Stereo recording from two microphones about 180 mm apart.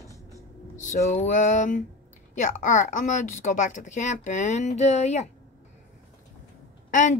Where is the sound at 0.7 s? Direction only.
40° left (ahead or behind).